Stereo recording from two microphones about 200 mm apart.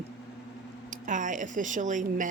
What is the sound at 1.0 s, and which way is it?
Speech, 40° right (ahead or behind).